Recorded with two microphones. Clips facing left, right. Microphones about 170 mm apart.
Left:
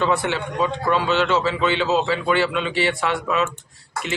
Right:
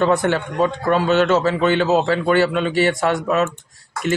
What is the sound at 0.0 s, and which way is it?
A man's voice, 45° right (ahead or behind).